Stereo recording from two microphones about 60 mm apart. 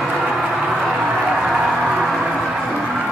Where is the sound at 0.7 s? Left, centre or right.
Centre.